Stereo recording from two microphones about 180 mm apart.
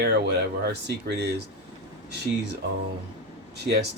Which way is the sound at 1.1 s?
70° right (ahead or behind).